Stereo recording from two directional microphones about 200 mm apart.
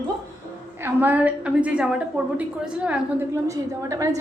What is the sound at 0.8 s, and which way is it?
A woman's voice, 10° right (ahead or behind).